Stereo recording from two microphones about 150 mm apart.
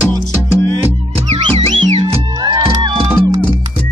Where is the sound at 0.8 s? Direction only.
40° right (ahead or behind).